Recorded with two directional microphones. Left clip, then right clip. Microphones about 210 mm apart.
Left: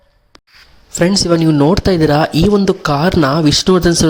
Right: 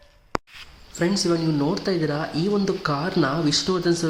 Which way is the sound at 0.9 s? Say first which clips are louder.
Left 10 dB; 40° left (ahead or behind).